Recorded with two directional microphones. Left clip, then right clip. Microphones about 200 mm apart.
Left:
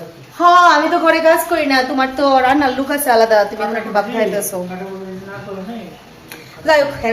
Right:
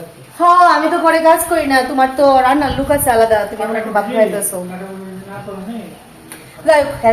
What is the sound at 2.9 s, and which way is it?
Speech, 20° left (ahead or behind).